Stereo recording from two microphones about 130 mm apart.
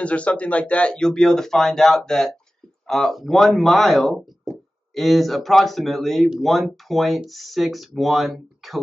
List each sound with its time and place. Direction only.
0.0 s speech: 10° left (ahead or behind)